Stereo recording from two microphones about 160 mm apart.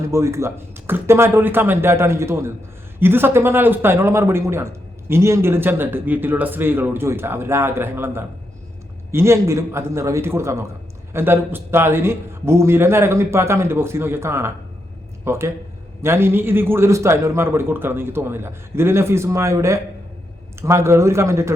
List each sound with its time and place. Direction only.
0.1 s a man's voice: 15° right (ahead or behind)